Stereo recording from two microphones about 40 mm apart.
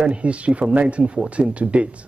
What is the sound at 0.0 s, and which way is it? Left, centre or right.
A man's voice, right.